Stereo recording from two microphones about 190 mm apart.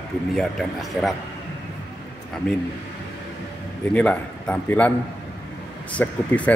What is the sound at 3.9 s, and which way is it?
A man's voice, 5° left (ahead or behind).